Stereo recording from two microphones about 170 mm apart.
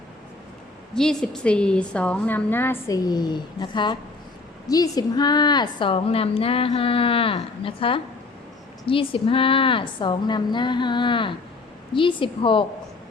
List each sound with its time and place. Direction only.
0.9 s a woman's voice: 5° left (ahead or behind); by 12.6 s 30° left (ahead or behind)